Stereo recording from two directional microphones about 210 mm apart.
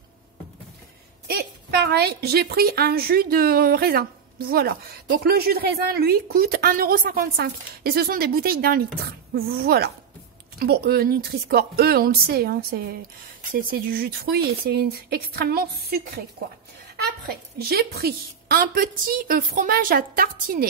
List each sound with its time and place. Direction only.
1.2 s a woman's voice: 50° right (ahead or behind)
17.6 s a woman's voice: 45° right (ahead or behind)